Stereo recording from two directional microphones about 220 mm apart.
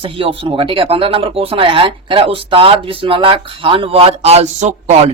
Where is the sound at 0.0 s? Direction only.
25° right (ahead or behind).